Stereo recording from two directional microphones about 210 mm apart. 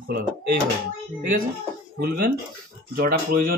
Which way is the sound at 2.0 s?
45° right (ahead or behind).